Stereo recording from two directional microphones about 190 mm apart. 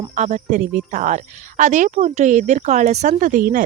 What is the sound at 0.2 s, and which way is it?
A woman's voice, 40° right (ahead or behind).